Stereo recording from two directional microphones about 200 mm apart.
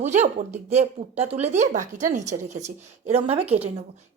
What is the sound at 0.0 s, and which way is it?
A woman's voice, 35° right (ahead or behind).